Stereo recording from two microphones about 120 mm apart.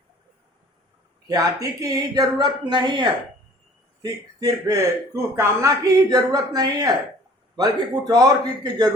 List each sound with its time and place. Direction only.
1.3 s speech: 30° right (ahead or behind)